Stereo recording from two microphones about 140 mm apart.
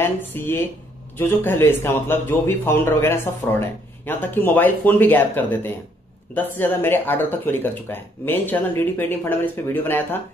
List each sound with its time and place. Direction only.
0.0 s a man's voice: 15° left (ahead or behind)